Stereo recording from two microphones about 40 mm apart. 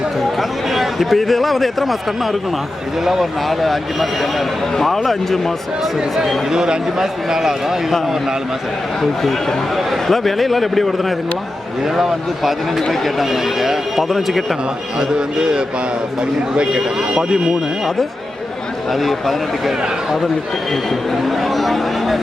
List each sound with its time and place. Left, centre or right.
0.3 s a man's voice: centre
3.0 s a man's voice: centre
4.2 s speech: centre
6.5 s a man's voice: centre
9.0 s speech: centre
14.9 s a man's voice: right
18.9 s speech: centre
21.2 s speech: centre